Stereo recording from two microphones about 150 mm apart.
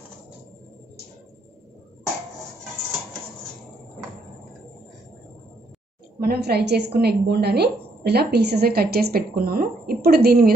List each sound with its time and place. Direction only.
6.1 s a woman's voice: 90° right